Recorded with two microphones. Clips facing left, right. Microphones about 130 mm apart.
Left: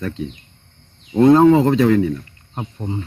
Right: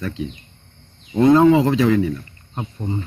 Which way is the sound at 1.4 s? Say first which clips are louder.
Left 2 dB; 45° left (ahead or behind).